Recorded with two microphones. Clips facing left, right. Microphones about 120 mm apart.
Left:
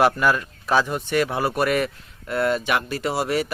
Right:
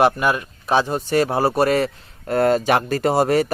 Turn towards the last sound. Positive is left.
turn(degrees=-45)  # may be behind; listen again after turning